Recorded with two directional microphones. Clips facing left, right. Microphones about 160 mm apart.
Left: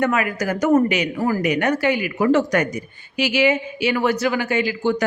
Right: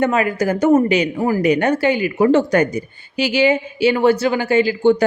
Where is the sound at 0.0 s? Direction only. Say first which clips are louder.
Right 4 dB; 30° right (ahead or behind).